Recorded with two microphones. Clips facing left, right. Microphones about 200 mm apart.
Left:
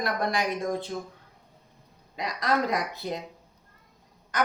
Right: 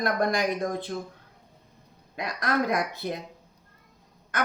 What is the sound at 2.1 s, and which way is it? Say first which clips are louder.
Speech: left 1 dB; 50° right (ahead or behind).